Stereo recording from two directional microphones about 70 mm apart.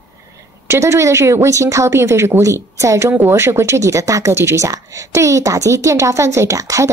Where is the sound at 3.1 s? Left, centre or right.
Right.